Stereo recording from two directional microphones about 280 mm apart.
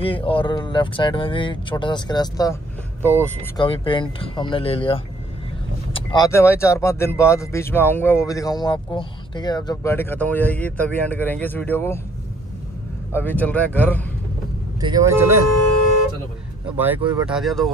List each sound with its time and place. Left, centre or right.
0.0 s speech: centre
3.6 s speech: centre
13.1 s speech: centre
14.8 s speech: centre
16.7 s speech: centre